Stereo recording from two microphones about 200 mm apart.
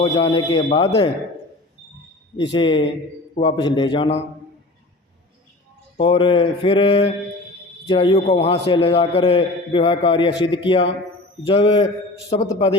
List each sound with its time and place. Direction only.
0.0 s a man's voice: 25° left (ahead or behind)
2.3 s a man's voice: 25° left (ahead or behind)
6.0 s a man's voice: 25° left (ahead or behind)